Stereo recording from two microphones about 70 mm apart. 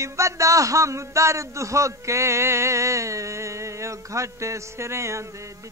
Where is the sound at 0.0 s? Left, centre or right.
Right.